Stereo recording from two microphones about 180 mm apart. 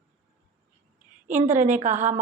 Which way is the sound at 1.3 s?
40° right (ahead or behind).